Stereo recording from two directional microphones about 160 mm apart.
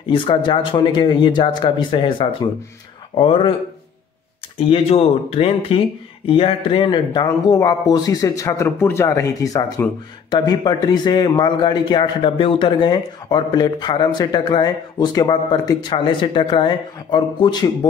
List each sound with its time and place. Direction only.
0.1 s speech: 30° left (ahead or behind)
4.6 s speech: 40° left (ahead or behind)